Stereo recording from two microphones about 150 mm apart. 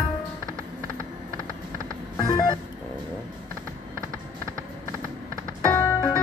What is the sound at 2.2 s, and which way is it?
Music, 25° left (ahead or behind).